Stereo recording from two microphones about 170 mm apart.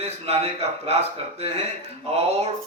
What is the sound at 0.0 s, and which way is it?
Speech, 35° right (ahead or behind).